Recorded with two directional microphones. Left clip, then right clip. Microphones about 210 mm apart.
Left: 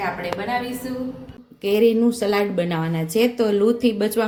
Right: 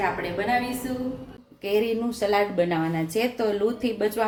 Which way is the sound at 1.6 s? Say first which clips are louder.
Left 7 dB; 40° left (ahead or behind).